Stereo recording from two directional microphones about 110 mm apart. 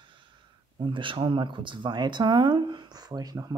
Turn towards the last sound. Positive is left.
turn(degrees=-35)  # may be behind; listen again after turning